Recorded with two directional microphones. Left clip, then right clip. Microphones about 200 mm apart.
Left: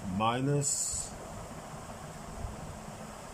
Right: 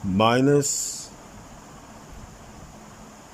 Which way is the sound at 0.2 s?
60° right (ahead or behind).